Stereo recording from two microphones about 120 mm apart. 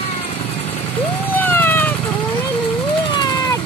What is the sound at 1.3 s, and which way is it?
Vehicle, 15° left (ahead or behind).